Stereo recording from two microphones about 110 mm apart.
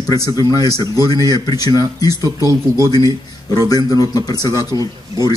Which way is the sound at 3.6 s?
35° left (ahead or behind).